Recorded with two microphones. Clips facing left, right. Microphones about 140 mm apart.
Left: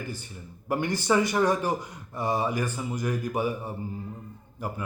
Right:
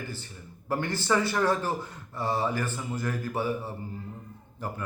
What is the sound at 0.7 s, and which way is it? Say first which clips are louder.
Speech: left 2 dB; 15° left (ahead or behind).